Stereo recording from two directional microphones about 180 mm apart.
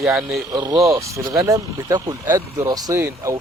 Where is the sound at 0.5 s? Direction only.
20° right (ahead or behind).